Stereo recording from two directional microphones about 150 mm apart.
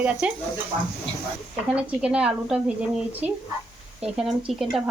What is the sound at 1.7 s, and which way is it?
Speech, 5° right (ahead or behind).